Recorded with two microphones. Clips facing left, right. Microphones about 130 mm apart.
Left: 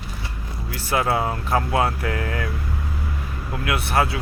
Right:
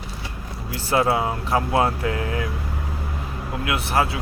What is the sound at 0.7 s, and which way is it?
Speech, 25° right (ahead or behind).